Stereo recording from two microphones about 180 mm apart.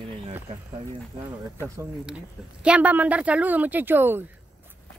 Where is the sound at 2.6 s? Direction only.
10° right (ahead or behind).